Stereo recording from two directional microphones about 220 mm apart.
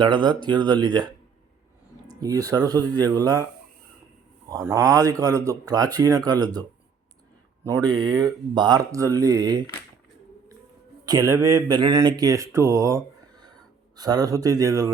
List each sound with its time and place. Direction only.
0.0 s speech: 20° right (ahead or behind)
2.2 s speech: 15° right (ahead or behind)
2.9 s speech: 10° left (ahead or behind)
4.4 s speech: 15° right (ahead or behind)
11.0 s speech: 15° right (ahead or behind)